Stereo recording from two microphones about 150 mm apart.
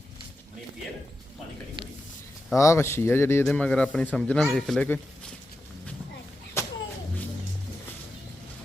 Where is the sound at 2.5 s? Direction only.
20° left (ahead or behind).